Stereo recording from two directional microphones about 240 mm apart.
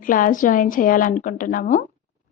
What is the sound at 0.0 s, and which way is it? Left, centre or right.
A woman's voice, left.